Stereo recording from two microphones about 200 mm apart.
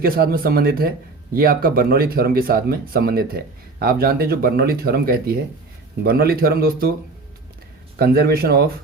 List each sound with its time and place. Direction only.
0.0 s speech: 50° right (ahead or behind)
7.9 s speech: 50° right (ahead or behind)